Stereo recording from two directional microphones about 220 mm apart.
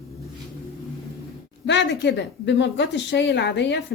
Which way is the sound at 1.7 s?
55° left (ahead or behind).